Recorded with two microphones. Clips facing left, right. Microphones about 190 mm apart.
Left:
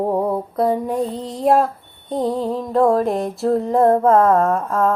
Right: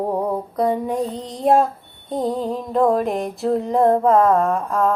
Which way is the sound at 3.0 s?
Centre (ahead or behind).